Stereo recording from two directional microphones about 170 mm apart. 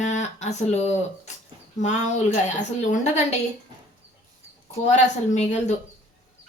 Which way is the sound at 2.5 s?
45° left (ahead or behind).